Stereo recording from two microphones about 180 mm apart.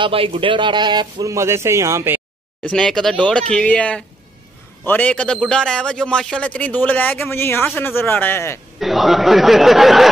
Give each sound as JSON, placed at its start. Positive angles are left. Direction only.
{"t": 0.0, "sound": "speech", "side_deg": -30}
{"t": 2.6, "sound": "a man's voice", "side_deg": 5}
{"t": 8.7, "sound": "speech", "side_deg": 0}